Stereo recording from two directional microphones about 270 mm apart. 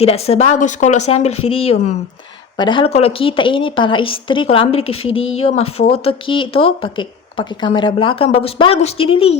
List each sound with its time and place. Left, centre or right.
0.0 s speech: left